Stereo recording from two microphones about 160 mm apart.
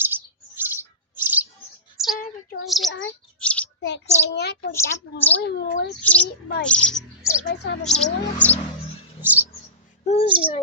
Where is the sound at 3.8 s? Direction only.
90° left.